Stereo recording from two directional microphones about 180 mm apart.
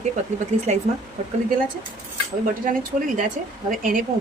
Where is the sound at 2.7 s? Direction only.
50° right (ahead or behind).